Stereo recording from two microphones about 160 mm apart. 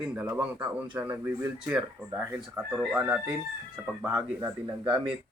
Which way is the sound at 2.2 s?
15° right (ahead or behind).